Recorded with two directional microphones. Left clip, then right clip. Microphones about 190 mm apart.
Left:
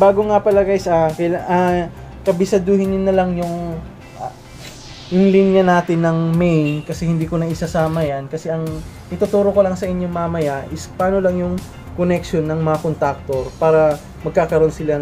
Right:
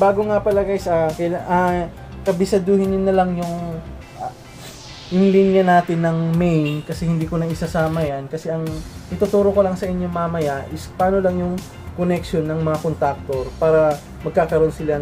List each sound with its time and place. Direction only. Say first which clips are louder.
0.0 s speech: left 4 dB; 15° left (ahead or behind)
2.2 s speech: left 2 dB; 5° left (ahead or behind)
5.4 s speech: right 1 dB; 5° left (ahead or behind)